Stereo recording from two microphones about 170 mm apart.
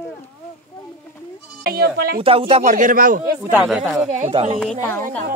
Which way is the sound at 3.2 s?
15° right (ahead or behind).